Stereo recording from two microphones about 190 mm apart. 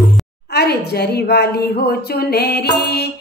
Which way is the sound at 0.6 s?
55° left (ahead or behind).